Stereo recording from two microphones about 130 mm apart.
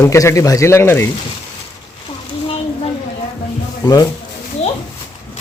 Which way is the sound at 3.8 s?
30° left (ahead or behind).